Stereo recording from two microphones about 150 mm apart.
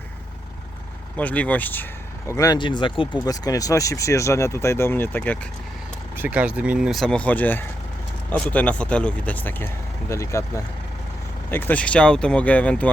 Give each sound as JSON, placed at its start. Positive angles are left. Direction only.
{"t": 1.1, "sound": "speech", "side_deg": 10}
{"t": 3.2, "sound": "speech", "side_deg": 25}
{"t": 6.1, "sound": "speech", "side_deg": -10}